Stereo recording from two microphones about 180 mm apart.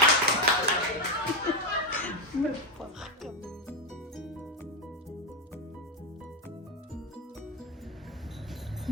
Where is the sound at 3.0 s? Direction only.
Centre (ahead or behind).